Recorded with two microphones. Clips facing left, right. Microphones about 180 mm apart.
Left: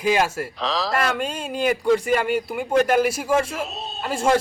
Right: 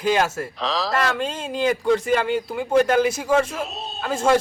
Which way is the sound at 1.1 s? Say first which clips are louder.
Even; 15° left (ahead or behind).